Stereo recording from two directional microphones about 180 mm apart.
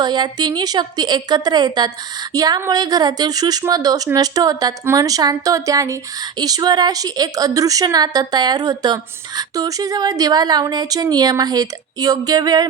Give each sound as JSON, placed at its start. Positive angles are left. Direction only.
{"t": 0.0, "sound": "a woman's voice", "side_deg": -25}